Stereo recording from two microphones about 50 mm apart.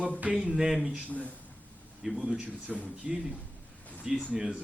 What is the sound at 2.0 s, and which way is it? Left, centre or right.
Speech, centre.